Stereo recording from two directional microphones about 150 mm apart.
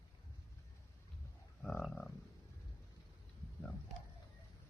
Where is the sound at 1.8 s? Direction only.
5° left (ahead or behind).